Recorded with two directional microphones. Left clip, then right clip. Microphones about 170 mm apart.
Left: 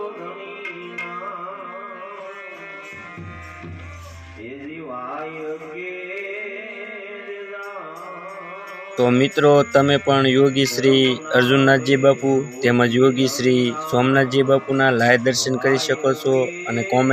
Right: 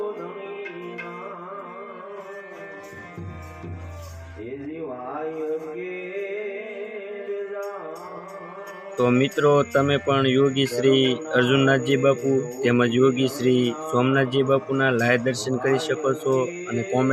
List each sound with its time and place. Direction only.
9.0 s speech: 25° left (ahead or behind)